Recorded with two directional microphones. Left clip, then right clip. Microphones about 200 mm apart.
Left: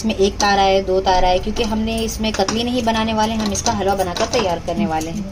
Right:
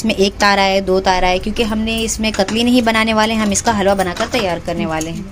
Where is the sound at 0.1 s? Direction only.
45° right (ahead or behind).